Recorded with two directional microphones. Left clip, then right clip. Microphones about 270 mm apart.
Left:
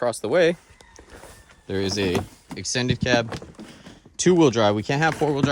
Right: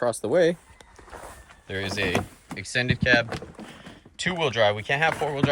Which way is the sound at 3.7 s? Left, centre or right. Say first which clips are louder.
Left 1 dB; centre.